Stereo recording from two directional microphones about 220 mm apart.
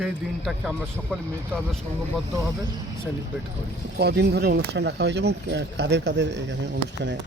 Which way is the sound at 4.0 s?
45° right (ahead or behind).